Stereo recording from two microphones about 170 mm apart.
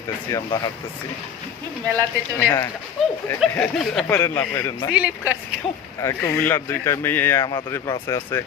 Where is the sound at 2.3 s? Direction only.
15° left (ahead or behind).